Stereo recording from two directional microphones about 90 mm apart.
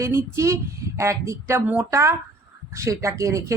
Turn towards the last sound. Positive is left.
turn(degrees=-35)  # may be behind; listen again after turning